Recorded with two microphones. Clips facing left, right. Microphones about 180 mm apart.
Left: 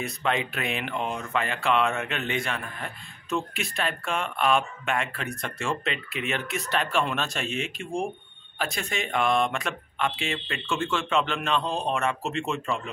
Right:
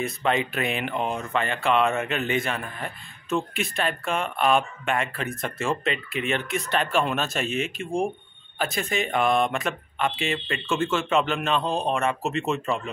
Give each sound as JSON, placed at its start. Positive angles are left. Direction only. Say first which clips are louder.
{"t": 0.0, "sound": "speech", "louder": "right 3 dB", "side_deg": 0}